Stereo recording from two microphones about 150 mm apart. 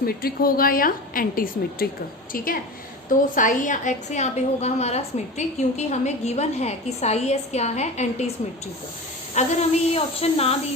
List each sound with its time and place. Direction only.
0.0 s a woman's voice: 85° left; by 8.3 s 50° left (ahead or behind)
9.3 s a woman's voice: 45° left (ahead or behind)